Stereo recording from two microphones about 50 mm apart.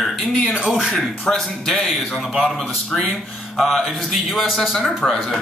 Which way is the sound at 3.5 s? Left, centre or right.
Centre.